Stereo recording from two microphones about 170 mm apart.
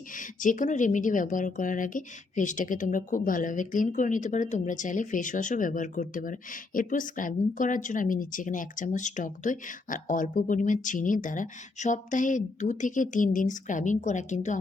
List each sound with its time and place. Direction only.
0.2 s speech: 50° left (ahead or behind)